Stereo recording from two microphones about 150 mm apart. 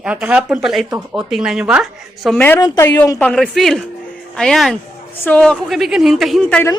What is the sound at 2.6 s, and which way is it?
Speech, 25° left (ahead or behind).